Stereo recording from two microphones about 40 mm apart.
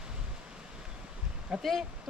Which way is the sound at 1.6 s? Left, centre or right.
Centre.